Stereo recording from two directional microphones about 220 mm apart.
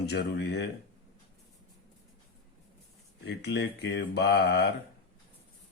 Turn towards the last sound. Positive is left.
turn(degrees=50)  # may be behind; listen again after turning